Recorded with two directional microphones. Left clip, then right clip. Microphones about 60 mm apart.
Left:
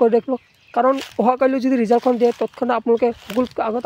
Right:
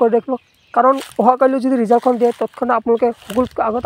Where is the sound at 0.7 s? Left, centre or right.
Centre.